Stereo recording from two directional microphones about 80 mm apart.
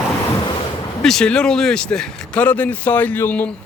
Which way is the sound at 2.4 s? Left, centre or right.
Centre.